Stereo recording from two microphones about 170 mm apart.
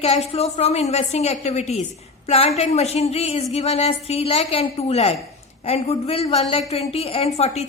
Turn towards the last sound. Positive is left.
turn(degrees=35)  # may be behind; listen again after turning